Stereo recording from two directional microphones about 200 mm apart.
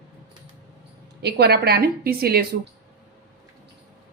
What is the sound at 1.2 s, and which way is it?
A woman's voice, 55° right (ahead or behind).